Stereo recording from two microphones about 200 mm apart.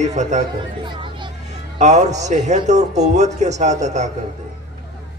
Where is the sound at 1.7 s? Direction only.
35° right (ahead or behind).